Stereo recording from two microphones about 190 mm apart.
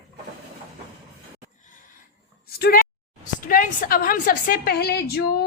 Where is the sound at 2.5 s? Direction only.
55° left (ahead or behind).